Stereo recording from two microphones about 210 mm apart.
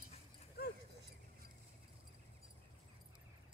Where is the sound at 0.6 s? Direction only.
50° left (ahead or behind).